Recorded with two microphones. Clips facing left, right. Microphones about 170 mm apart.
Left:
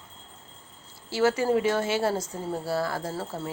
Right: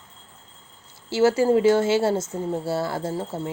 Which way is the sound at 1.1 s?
30° right (ahead or behind).